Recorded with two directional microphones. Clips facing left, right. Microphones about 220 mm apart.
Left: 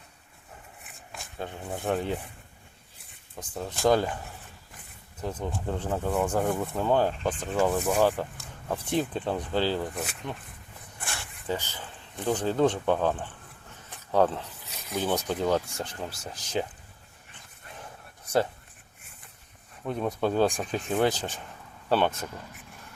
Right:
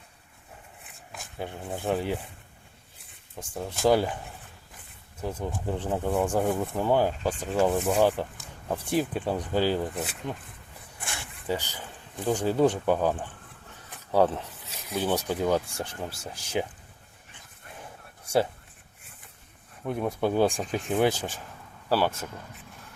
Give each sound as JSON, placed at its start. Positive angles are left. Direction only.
{"t": 1.1, "sound": "a sound", "side_deg": -15}
{"t": 1.8, "sound": "speech", "side_deg": -5}
{"t": 3.6, "sound": "speech", "side_deg": -10}
{"t": 5.2, "sound": "speech", "side_deg": -15}
{"t": 7.7, "sound": "speech", "side_deg": -20}
{"t": 19.8, "sound": "speech", "side_deg": -10}